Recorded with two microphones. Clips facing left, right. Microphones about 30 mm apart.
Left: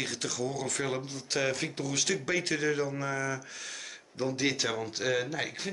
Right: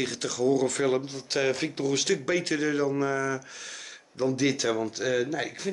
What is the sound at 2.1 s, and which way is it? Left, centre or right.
Speech, centre.